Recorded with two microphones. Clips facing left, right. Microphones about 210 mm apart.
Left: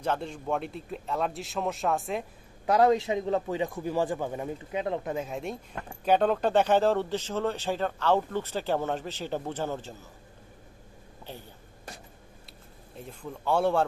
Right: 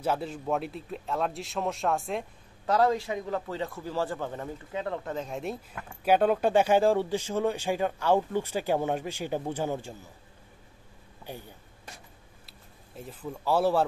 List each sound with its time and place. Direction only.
0.0 s speech: 5° right (ahead or behind)
2.6 s speech: 15° left (ahead or behind); by 9.9 s 10° right (ahead or behind)
11.3 s speech: 10° right (ahead or behind)
12.9 s speech: 5° right (ahead or behind)